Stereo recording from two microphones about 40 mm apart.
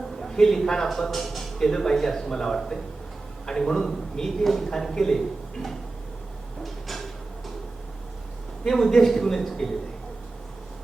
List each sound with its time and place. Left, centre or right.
0.2 s a man's voice: centre
6.6 s a sound: centre
8.6 s a man's voice: centre